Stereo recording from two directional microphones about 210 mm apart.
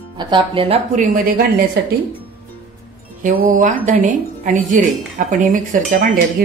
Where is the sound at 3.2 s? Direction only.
40° right (ahead or behind).